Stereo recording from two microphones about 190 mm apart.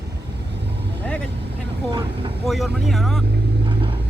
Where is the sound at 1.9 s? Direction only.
20° right (ahead or behind).